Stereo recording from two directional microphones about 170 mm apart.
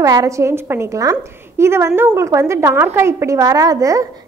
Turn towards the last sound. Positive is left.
turn(degrees=-20)  # may be behind; listen again after turning